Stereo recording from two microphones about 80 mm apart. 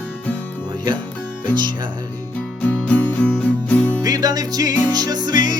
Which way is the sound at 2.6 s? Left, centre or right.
Centre.